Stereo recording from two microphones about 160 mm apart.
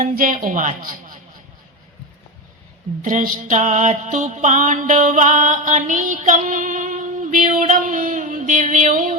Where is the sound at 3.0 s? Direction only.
55° right (ahead or behind).